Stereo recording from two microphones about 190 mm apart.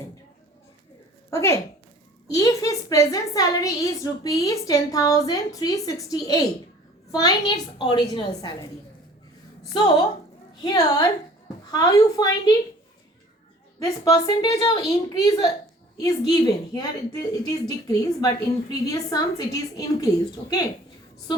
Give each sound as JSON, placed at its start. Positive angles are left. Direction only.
{"t": 1.3, "sound": "a woman's voice", "side_deg": 15}
{"t": 9.7, "sound": "a woman's voice", "side_deg": 25}
{"t": 13.8, "sound": "a woman's voice", "side_deg": 20}